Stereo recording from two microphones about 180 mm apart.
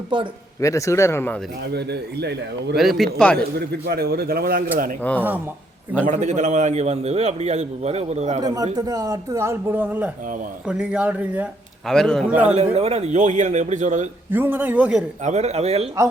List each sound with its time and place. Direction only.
0.1 s speech: 25° right (ahead or behind)
0.6 s speech: 15° left (ahead or behind)
1.6 s speech: 65° right (ahead or behind)
2.7 s speech: centre (ahead or behind)
3.7 s a man's voice: 60° right (ahead or behind)
5.1 s speech: 10° left (ahead or behind)
6.1 s a man's voice: 40° right (ahead or behind)
8.7 s a man's voice: 20° right (ahead or behind)
11.9 s a man's voice: centre (ahead or behind)
12.7 s a man's voice: 35° right (ahead or behind)
14.3 s a man's voice: 10° right (ahead or behind)
15.2 s a man's voice: 40° right (ahead or behind)